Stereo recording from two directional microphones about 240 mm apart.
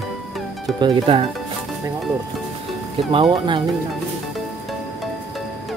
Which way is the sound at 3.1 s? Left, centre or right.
Right.